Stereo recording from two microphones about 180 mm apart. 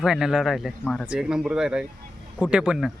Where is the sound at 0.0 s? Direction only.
5° right (ahead or behind).